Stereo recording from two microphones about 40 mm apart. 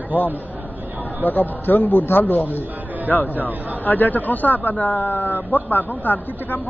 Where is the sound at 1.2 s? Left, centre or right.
Left.